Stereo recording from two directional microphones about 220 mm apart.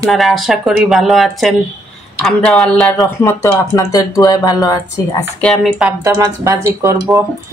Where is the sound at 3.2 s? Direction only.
15° left (ahead or behind).